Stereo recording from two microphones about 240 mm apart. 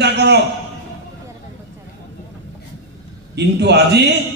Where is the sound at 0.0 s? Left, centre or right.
Right.